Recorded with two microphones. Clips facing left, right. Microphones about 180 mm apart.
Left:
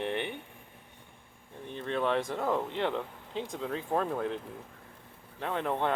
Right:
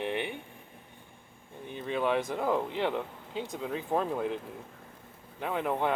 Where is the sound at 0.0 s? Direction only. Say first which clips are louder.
Even; 10° right (ahead or behind).